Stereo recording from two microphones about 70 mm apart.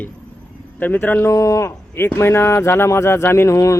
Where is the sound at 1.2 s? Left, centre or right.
Left.